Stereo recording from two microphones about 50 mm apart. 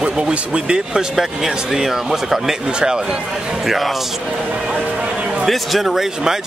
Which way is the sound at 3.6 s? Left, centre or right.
Centre.